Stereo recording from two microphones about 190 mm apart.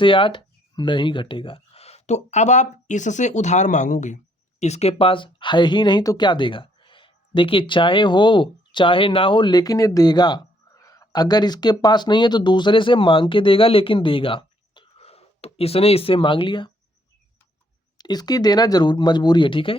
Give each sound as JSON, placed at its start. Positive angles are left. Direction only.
{"t": 0.0, "sound": "speech", "side_deg": 25}
{"t": 17.9, "sound": "speech", "side_deg": 20}